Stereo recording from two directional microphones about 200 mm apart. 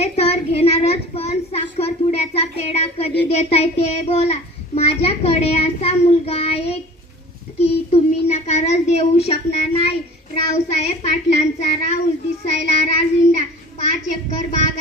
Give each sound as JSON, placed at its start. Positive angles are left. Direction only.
{"t": 0.0, "sound": "a child's voice", "side_deg": 30}
{"t": 10.5, "sound": "child singing", "side_deg": 35}
{"t": 13.9, "sound": "speech", "side_deg": 35}